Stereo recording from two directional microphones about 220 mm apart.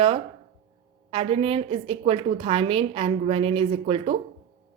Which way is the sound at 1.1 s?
25° right (ahead or behind).